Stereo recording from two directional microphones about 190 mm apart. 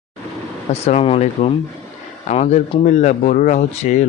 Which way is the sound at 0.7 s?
35° left (ahead or behind).